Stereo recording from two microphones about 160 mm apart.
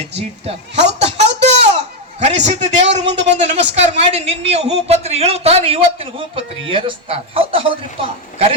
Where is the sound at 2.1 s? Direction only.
45° right (ahead or behind).